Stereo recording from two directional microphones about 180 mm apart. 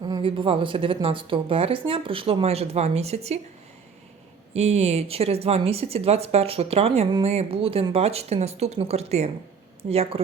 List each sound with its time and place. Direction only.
0.0 s speech: 25° right (ahead or behind)
4.5 s speech: 35° right (ahead or behind)